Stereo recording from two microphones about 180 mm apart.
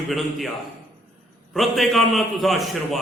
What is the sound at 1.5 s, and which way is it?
A man's voice, centre (ahead or behind).